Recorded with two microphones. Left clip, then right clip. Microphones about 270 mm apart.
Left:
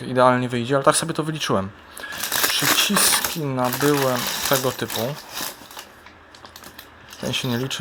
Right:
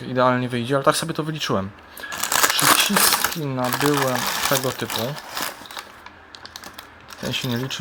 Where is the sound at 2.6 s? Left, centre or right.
Centre.